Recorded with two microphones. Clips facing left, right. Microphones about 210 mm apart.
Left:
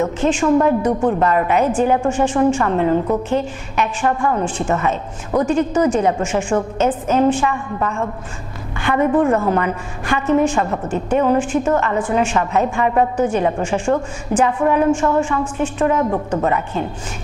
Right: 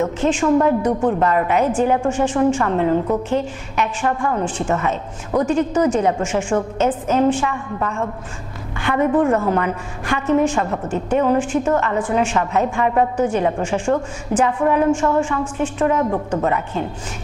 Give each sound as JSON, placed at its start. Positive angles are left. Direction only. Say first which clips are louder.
{"t": 0.4, "sound": "a woman's voice", "louder": "left 1 dB", "side_deg": 25}